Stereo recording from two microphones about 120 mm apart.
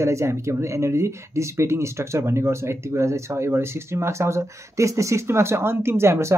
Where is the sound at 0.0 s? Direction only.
25° right (ahead or behind).